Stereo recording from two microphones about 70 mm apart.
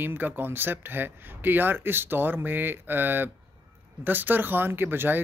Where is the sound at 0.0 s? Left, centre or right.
Right.